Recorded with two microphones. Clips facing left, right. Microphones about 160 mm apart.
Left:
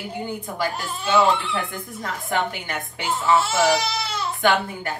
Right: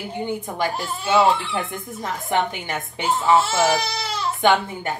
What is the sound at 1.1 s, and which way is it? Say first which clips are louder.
A woman's voice: right 1 dB; 25° right (ahead or behind).